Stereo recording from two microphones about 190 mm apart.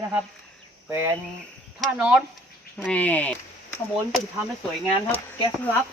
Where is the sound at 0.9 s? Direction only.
10° right (ahead or behind); by 3.3 s 10° left (ahead or behind).